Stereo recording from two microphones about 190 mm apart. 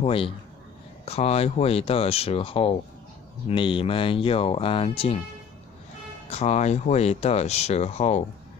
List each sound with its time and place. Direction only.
0.0 s speech: 30° left (ahead or behind)
6.3 s speech: 35° left (ahead or behind)